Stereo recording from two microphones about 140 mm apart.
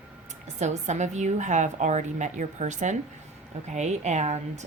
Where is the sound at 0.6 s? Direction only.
55° right (ahead or behind).